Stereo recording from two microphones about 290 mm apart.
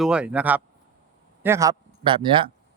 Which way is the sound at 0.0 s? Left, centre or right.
Centre.